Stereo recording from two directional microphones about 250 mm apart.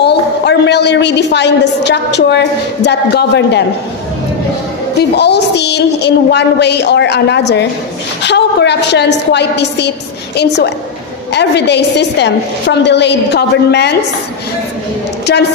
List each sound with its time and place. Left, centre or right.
0.0 s a woman's voice: left
5.1 s a woman's voice: left